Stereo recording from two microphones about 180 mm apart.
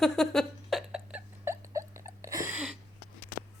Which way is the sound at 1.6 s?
15° right (ahead or behind).